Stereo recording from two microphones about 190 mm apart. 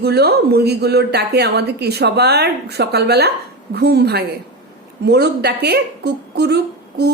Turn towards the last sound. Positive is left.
turn(degrees=-60)  # may be behind; listen again after turning